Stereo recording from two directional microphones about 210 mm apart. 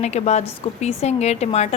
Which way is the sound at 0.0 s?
30° left (ahead or behind).